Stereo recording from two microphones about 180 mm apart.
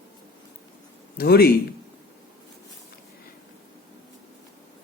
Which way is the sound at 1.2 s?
60° left (ahead or behind).